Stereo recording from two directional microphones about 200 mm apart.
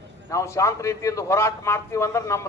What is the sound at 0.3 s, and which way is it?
A man's voice, 15° left (ahead or behind).